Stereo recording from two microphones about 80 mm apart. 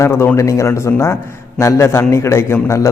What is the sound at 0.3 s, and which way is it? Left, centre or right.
A man's voice, left.